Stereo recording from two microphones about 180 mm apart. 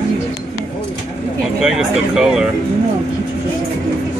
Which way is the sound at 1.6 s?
5° right (ahead or behind).